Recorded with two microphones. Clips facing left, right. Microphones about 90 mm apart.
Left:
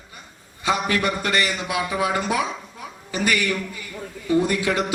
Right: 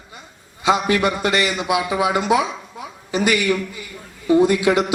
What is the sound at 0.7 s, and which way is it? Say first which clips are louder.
A man's voice: right 4 dB; 20° right (ahead or behind).